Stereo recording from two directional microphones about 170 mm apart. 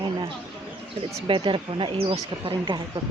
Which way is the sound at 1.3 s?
30° right (ahead or behind).